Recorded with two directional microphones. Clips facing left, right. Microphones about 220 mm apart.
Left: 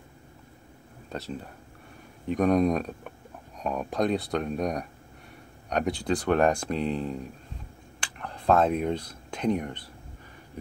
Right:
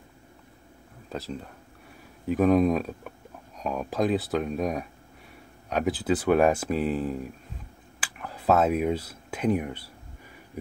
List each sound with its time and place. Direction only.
1.0 s speech: centre (ahead or behind)